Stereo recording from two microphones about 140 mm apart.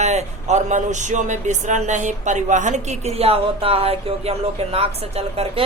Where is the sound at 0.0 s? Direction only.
55° right (ahead or behind).